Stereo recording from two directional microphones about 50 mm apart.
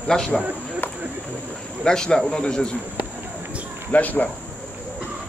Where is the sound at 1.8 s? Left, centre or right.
Centre.